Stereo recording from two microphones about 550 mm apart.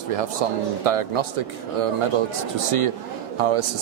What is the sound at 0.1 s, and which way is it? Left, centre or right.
A man's voice, right.